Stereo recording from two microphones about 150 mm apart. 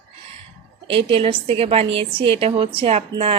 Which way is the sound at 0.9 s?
40° right (ahead or behind).